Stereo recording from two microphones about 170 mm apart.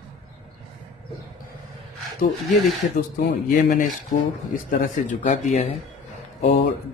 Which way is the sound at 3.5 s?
50° left (ahead or behind).